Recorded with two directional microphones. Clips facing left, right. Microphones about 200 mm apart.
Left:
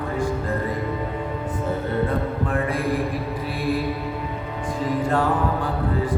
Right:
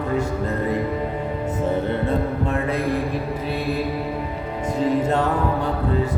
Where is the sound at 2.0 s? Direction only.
25° right (ahead or behind).